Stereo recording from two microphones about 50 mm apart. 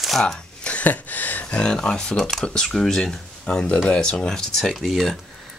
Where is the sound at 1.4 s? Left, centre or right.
Left.